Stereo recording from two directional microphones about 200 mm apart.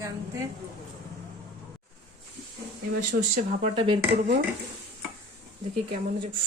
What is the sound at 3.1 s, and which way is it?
Speech, 55° right (ahead or behind).